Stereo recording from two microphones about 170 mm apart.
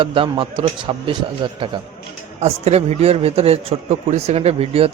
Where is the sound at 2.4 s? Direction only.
40° right (ahead or behind).